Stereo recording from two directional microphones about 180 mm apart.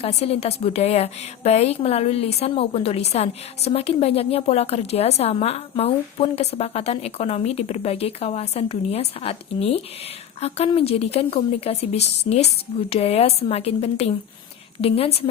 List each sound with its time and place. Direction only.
0.0 s a woman's voice: 35° left (ahead or behind)